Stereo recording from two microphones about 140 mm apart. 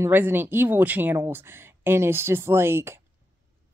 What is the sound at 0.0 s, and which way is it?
A woman's voice, 15° right (ahead or behind).